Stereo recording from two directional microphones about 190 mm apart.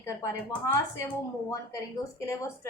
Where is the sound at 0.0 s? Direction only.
15° left (ahead or behind).